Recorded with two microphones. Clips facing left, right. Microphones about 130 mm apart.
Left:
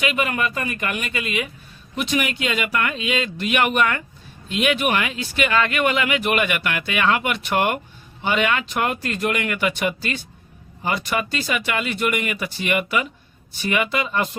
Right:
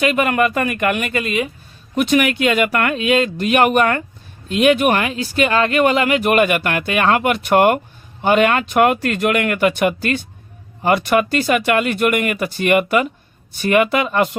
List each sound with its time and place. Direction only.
0.0 s speech: 45° right (ahead or behind)
0.3 s speech: 60° right (ahead or behind)
1.2 s speech: 40° right (ahead or behind)
2.0 s speech: 55° right (ahead or behind)